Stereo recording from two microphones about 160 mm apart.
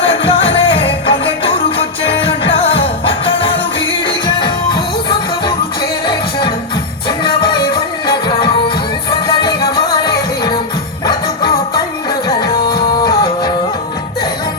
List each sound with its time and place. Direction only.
0.0 s music: 35° left (ahead or behind)
9.0 s music: 25° left (ahead or behind)
12.7 s music: 25° left (ahead or behind)